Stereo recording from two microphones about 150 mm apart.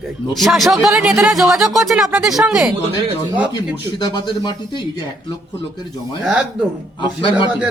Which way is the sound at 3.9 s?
30° left (ahead or behind).